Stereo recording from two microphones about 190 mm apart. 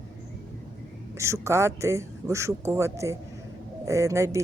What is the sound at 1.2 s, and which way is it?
Speech, 15° right (ahead or behind).